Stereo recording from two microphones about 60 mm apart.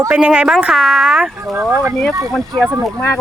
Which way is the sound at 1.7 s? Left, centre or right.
Right.